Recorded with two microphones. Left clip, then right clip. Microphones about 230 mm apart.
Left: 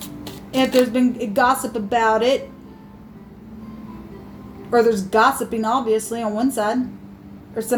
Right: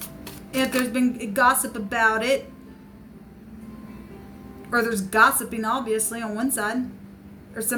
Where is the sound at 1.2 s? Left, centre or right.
Right.